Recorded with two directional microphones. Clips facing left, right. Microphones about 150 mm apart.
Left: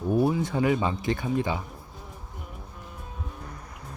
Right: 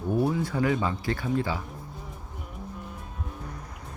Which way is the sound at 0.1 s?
20° left (ahead or behind).